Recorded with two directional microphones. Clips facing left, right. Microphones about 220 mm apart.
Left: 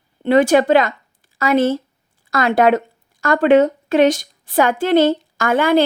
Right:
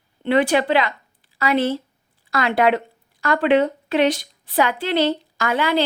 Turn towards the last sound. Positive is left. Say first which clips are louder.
# left 6 dB
turn(degrees=50)  # may be behind; listen again after turning